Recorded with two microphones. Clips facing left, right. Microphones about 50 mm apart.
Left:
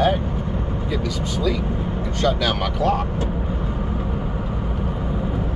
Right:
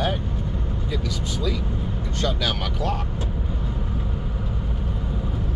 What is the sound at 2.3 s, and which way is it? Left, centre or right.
Speech, centre.